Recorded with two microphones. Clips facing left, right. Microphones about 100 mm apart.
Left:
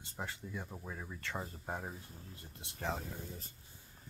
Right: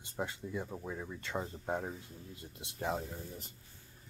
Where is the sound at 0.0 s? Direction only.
20° right (ahead or behind).